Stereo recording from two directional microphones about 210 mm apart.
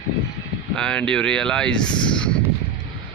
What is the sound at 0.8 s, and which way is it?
Speech, 5° left (ahead or behind).